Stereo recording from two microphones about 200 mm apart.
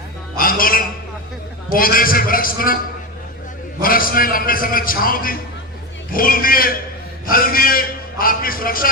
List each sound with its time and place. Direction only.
0.3 s a sound: 45° left (ahead or behind)
1.7 s a man's voice: 45° left (ahead or behind)
3.8 s a man's voice: 45° left (ahead or behind)